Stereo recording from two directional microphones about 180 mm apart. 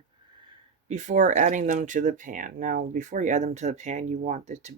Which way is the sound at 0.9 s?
40° right (ahead or behind).